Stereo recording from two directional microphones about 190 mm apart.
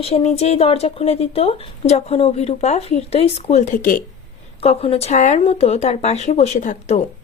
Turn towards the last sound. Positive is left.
turn(degrees=40)  # may be behind; listen again after turning